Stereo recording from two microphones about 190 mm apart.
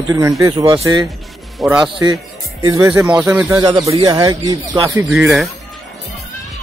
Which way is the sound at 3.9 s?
30° right (ahead or behind).